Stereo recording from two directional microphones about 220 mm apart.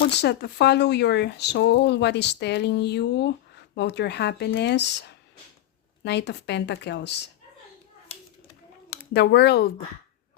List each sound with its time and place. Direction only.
0.0 s speech: 50° left (ahead or behind)
8.1 s a sound: 30° left (ahead or behind)
8.9 s speech: 50° left (ahead or behind)